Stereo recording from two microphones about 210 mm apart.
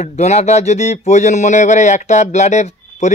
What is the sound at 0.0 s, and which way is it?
Speech, 30° left (ahead or behind).